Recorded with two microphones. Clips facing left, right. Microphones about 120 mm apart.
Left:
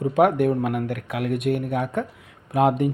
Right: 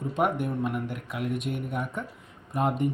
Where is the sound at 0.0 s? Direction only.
70° left (ahead or behind).